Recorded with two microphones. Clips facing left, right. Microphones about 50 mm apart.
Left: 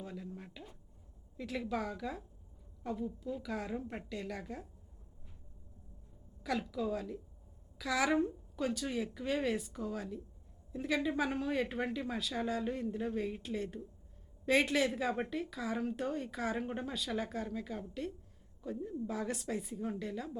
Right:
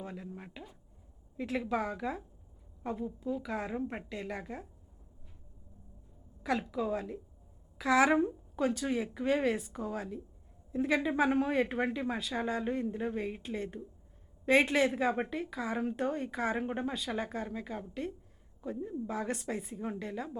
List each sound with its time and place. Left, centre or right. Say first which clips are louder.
0.0 s a sound: right 2 dB; right
1.4 s a woman's voice: right 4 dB; right
6.4 s a woman's voice: right 3 dB; right